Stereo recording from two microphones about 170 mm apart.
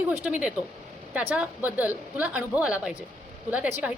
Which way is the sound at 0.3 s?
5° right (ahead or behind).